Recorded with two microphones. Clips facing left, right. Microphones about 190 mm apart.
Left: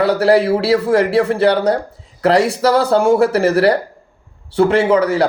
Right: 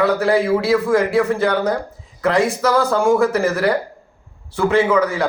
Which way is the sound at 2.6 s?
30° left (ahead or behind).